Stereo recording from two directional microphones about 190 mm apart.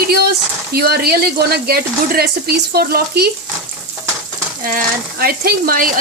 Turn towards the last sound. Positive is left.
turn(degrees=-45)  # may be behind; listen again after turning